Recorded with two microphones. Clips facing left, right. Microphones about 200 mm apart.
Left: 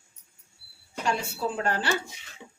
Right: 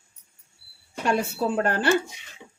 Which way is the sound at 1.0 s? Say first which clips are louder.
Right 5 dB; 55° right (ahead or behind).